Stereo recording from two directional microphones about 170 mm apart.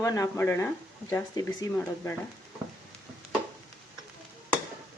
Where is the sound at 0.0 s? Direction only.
20° left (ahead or behind).